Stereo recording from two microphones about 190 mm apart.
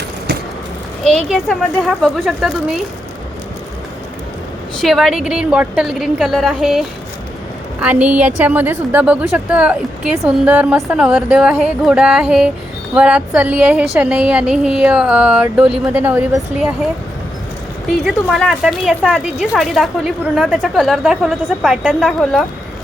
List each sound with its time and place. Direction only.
0.3 s vehicle: 60° right (ahead or behind)
1.0 s a woman's voice: centre (ahead or behind)
4.8 s a woman's voice: centre (ahead or behind)
18.0 s a woman's voice: centre (ahead or behind)